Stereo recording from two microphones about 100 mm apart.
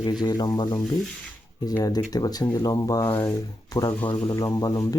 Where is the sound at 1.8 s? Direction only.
40° left (ahead or behind).